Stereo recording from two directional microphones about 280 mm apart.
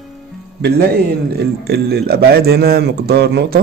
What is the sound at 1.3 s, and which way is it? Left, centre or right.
A man's voice, right.